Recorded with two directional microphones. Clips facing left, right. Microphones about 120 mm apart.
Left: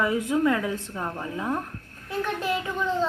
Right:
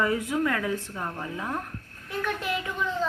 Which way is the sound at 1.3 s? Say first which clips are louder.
Left 3 dB; 20° left (ahead or behind).